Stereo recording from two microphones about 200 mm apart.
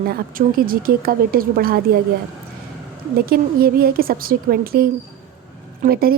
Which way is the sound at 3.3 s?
45° right (ahead or behind).